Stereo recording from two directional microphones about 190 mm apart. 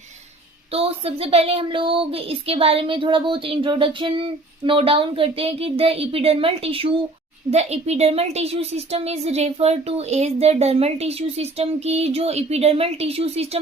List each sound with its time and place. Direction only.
0.7 s a woman's voice: 30° right (ahead or behind)